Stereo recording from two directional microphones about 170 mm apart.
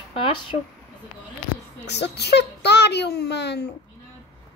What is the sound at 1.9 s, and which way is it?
A child's voice, 80° left.